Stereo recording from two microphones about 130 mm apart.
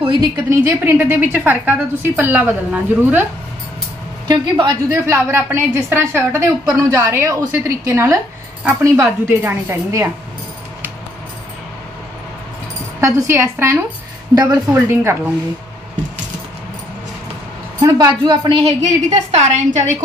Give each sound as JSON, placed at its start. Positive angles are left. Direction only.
{"t": 0.0, "sound": "a woman's voice", "side_deg": -40}
{"t": 0.5, "sound": "a woman's voice", "side_deg": -20}
{"t": 4.3, "sound": "a woman's voice", "side_deg": -35}
{"t": 5.0, "sound": "a woman's voice", "side_deg": -20}
{"t": 13.0, "sound": "a woman's voice", "side_deg": -20}
{"t": 17.8, "sound": "a woman's voice", "side_deg": -30}
{"t": 18.8, "sound": "a woman's voice", "side_deg": -60}